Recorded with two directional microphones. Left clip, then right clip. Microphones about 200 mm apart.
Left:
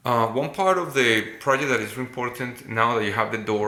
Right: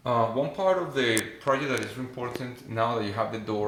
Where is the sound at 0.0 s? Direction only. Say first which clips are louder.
Left 3 dB; 15° left (ahead or behind).